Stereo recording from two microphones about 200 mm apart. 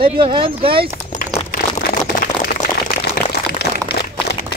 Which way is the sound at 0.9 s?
40° left (ahead or behind).